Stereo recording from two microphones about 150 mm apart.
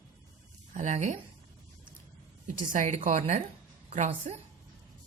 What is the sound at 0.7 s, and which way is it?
Speech, 50° right (ahead or behind).